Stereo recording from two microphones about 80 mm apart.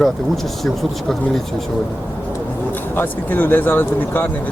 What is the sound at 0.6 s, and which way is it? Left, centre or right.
Speech, centre.